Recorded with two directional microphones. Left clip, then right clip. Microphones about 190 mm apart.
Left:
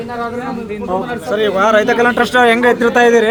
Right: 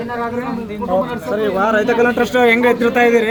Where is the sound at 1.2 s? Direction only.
30° left (ahead or behind).